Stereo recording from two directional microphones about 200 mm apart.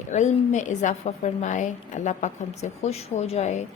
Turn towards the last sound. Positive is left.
turn(degrees=35)  # may be behind; listen again after turning